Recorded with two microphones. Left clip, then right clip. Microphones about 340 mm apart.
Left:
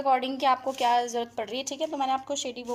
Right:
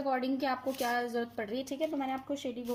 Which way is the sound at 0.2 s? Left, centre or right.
Left.